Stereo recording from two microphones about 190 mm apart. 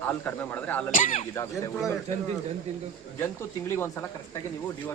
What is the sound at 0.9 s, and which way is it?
Speech, 40° left (ahead or behind).